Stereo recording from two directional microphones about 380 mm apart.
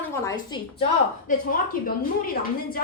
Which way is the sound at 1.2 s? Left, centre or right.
Left.